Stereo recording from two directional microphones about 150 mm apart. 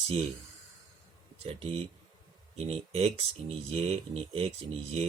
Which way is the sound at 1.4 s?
40° right (ahead or behind).